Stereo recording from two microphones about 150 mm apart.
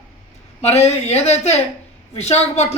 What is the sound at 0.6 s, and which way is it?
Speech, 45° left (ahead or behind).